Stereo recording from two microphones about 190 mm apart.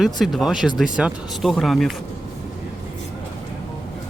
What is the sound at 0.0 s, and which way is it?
Speech, centre (ahead or behind).